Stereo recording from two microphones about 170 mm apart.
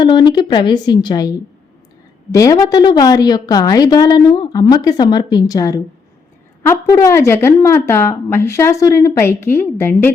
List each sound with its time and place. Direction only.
0.0 s a woman's voice: 25° left (ahead or behind)
2.3 s a woman's voice: 20° left (ahead or behind)